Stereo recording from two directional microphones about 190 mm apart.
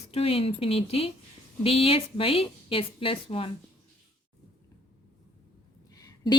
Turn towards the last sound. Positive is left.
turn(degrees=20)  # may be behind; listen again after turning